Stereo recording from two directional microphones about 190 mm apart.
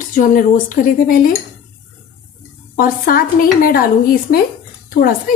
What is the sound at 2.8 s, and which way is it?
A woman's voice, 50° left (ahead or behind).